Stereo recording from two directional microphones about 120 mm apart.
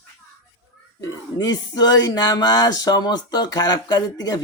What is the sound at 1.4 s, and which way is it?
Speech, 35° left (ahead or behind).